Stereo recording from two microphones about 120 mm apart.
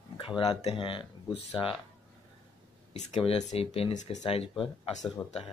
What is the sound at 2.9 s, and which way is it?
Speech, 60° left (ahead or behind).